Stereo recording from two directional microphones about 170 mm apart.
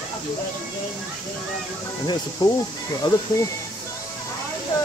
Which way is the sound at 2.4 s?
25° left (ahead or behind).